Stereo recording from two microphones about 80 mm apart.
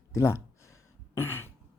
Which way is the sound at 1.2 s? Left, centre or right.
Left.